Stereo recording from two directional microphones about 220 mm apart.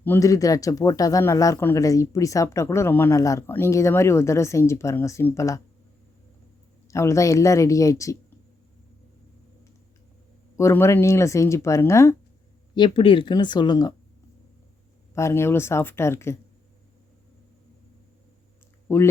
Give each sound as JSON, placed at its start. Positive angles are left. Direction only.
{"t": 0.0, "sound": "speech", "side_deg": 10}
{"t": 6.8, "sound": "speech", "side_deg": 15}
{"t": 10.6, "sound": "speech", "side_deg": 10}
{"t": 15.1, "sound": "speech", "side_deg": 10}
{"t": 18.9, "sound": "speech", "side_deg": 10}